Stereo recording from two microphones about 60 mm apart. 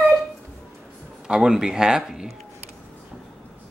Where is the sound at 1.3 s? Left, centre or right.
Centre.